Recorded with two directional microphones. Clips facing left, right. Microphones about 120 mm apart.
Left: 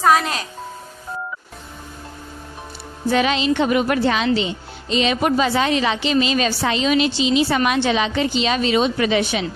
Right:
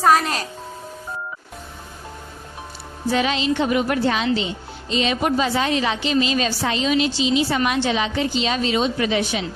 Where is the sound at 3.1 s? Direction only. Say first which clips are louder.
Left 3 dB; 75° left (ahead or behind).